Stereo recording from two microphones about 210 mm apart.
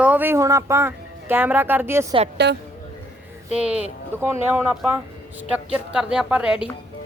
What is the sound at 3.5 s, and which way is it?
A woman's voice, 5° right (ahead or behind).